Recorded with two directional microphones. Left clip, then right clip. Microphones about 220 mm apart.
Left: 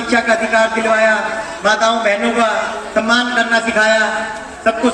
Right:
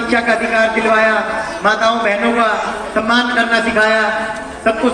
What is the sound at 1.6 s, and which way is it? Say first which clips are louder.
Speech: left 1 dB; 55° left (ahead or behind).